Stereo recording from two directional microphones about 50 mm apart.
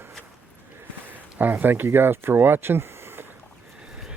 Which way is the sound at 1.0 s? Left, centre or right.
Right.